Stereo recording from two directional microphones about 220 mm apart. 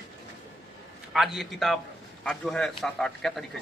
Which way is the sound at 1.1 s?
Centre (ahead or behind).